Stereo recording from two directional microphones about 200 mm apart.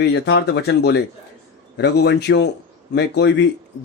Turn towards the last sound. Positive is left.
turn(degrees=60)  # may be behind; listen again after turning